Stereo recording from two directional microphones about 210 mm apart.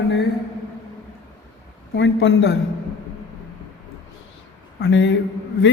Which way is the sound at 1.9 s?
60° left (ahead or behind).